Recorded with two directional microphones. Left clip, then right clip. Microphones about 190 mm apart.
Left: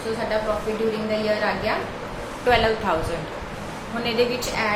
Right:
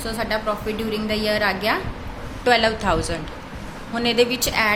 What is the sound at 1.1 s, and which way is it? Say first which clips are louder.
A woman's voice: right 4 dB; 60° right (ahead or behind).